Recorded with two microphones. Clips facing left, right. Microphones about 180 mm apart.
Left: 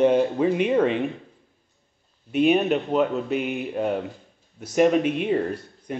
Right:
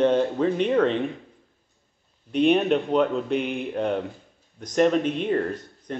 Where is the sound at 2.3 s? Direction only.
5° left (ahead or behind).